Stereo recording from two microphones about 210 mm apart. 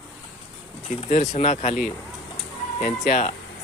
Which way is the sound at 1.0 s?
30° left (ahead or behind).